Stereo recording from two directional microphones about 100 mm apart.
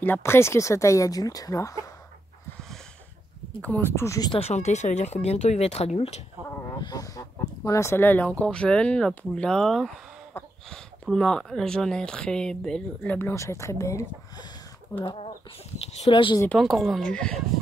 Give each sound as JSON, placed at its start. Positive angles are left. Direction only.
{"t": 0.0, "sound": "speech", "side_deg": 20}
{"t": 3.6, "sound": "speech", "side_deg": 20}
{"t": 4.5, "sound": "speech", "side_deg": 60}
{"t": 5.0, "sound": "speech", "side_deg": 90}
{"t": 6.8, "sound": "speech", "side_deg": 40}
{"t": 13.3, "sound": "speech", "side_deg": 30}
{"t": 15.0, "sound": "chicken", "side_deg": 60}
{"t": 16.1, "sound": "speech", "side_deg": 55}
{"t": 16.5, "sound": "speech", "side_deg": 5}